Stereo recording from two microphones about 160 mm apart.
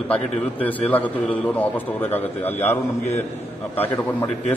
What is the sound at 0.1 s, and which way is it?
A man's voice, 10° left (ahead or behind).